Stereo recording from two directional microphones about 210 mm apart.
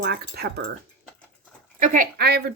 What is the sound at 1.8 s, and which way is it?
Speech, 40° right (ahead or behind).